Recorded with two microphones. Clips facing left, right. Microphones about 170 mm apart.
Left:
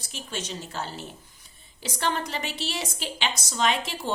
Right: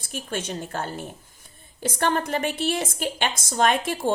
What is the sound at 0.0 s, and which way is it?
A woman's voice, 50° right (ahead or behind).